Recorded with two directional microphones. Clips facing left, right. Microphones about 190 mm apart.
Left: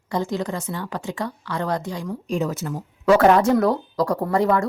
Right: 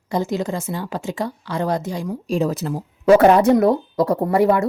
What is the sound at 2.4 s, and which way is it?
Speech, 35° right (ahead or behind).